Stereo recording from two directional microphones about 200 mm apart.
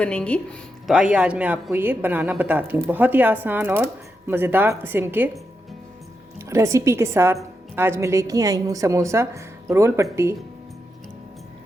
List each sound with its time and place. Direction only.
0.0 s a woman's voice: 5° left (ahead or behind)
6.4 s a woman's voice: 15° right (ahead or behind)